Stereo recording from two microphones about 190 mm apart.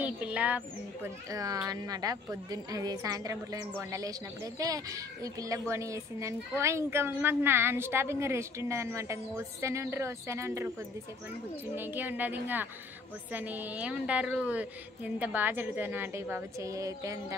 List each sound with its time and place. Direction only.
0.0 s speech: 5° right (ahead or behind)
1.3 s a woman's voice: 20° right (ahead or behind)
11.7 s a woman's voice: 10° right (ahead or behind)